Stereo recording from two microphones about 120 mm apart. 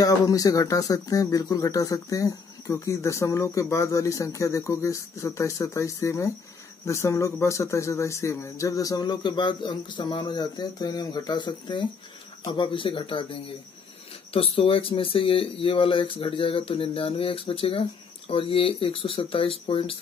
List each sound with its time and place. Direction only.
0.0 s speech: 30° left (ahead or behind); by 20.0 s 50° left (ahead or behind)